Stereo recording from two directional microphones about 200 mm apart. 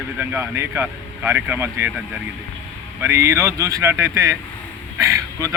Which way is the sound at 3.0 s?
15° right (ahead or behind).